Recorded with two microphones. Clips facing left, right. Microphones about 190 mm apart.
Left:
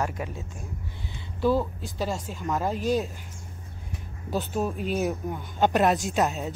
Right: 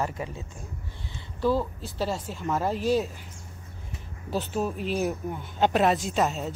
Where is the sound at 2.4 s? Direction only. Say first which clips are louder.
Right 1 dB; 5° right (ahead or behind).